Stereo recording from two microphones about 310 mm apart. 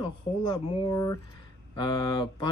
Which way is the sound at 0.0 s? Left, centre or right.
Centre.